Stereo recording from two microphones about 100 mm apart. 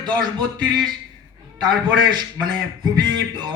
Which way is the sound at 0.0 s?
45° right (ahead or behind).